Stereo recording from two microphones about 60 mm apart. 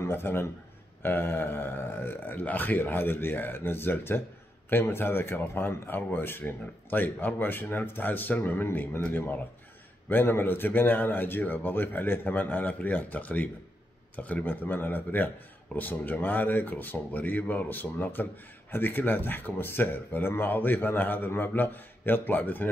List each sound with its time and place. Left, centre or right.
0.0 s a man's voice: left
10.0 s speech: left